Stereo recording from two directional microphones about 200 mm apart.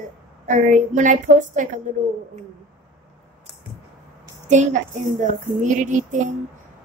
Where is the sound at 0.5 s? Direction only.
40° right (ahead or behind).